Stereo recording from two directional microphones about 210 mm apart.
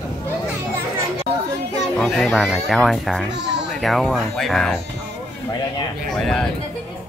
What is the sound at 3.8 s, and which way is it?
Speech, centre (ahead or behind).